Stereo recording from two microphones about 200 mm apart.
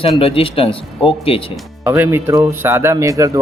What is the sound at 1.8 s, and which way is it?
Speech, 10° right (ahead or behind).